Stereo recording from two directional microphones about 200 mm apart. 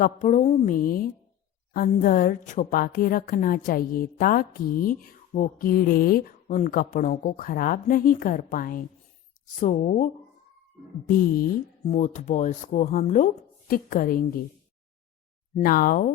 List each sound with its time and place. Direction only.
0.0 s a woman's voice: 40° left (ahead or behind)
15.5 s a woman's voice: 45° left (ahead or behind)